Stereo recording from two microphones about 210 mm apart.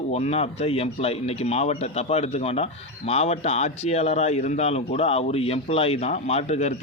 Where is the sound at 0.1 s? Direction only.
30° left (ahead or behind).